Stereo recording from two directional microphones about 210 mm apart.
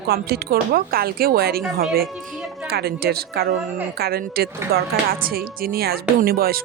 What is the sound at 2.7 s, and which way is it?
Speech, 50° right (ahead or behind).